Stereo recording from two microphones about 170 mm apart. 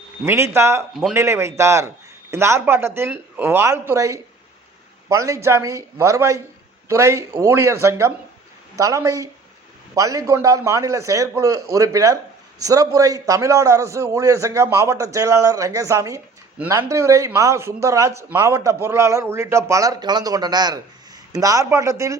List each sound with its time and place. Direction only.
0.3 s a man's voice: 15° right (ahead or behind)